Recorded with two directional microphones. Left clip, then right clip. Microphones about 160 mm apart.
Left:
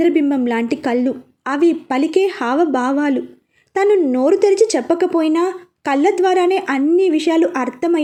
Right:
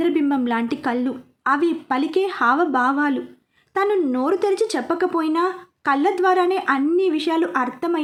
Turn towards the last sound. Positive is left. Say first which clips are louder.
# left 4 dB
turn(degrees=15)  # may be behind; listen again after turning